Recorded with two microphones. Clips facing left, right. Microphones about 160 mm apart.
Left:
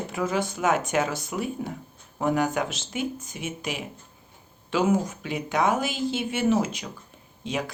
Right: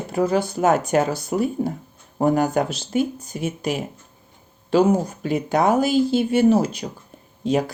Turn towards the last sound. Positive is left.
turn(degrees=-40)  # may be behind; listen again after turning